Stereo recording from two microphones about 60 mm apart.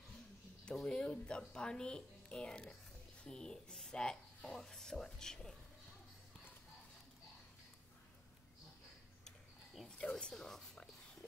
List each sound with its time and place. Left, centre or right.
0.8 s speech: centre
9.8 s a sound: centre
10.1 s speech: centre